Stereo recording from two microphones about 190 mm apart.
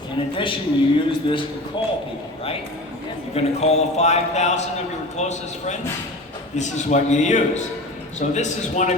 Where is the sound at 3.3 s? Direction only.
35° left (ahead or behind).